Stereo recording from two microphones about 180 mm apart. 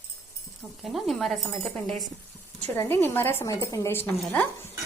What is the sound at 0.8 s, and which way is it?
Speech, centre (ahead or behind).